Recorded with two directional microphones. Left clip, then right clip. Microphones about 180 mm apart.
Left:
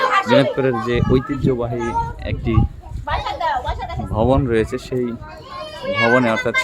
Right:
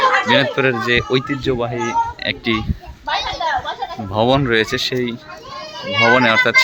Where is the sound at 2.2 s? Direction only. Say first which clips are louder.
Right 4 dB; 10° left (ahead or behind).